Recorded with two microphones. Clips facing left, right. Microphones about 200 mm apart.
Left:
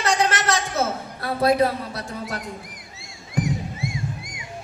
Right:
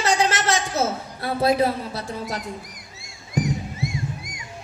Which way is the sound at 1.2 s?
25° right (ahead or behind).